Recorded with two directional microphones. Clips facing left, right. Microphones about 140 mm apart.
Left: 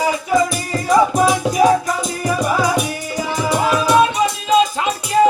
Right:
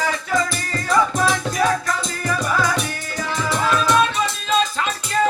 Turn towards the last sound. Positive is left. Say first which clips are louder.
# left 6 dB
turn(degrees=15)  # may be behind; listen again after turning